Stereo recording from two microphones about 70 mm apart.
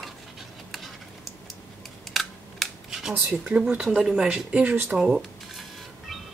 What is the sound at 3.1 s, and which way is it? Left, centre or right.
Speech, centre.